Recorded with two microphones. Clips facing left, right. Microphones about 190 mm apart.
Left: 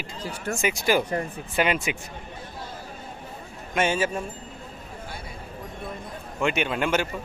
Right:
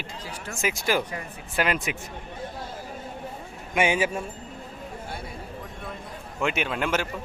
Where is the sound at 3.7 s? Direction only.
15° right (ahead or behind).